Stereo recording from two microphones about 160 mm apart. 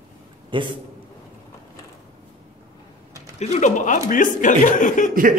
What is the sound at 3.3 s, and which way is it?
Speech, 45° left (ahead or behind).